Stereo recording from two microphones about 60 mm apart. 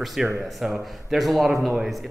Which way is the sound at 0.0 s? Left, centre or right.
Centre.